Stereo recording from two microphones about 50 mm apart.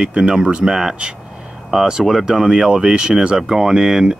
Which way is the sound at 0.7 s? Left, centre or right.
Centre.